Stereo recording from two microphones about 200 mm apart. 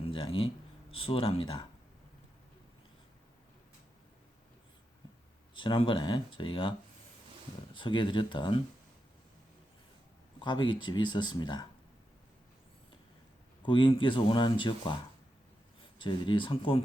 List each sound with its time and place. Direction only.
0.0 s a sound: 25° left (ahead or behind)
0.9 s speech: 25° left (ahead or behind)
5.5 s speech: 25° left (ahead or behind)
10.4 s speech: 20° left (ahead or behind)
13.6 s speech: 25° left (ahead or behind)